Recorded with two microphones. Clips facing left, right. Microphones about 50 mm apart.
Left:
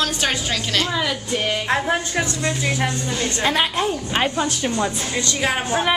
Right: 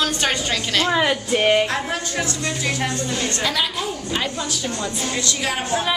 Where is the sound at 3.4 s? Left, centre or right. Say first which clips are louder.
Left 7 dB; left.